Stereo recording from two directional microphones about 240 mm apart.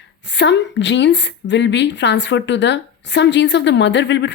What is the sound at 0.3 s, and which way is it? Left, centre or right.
A woman's voice, left.